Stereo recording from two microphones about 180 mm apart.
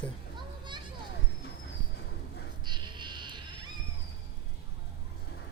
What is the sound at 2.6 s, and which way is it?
Insect, 25° right (ahead or behind).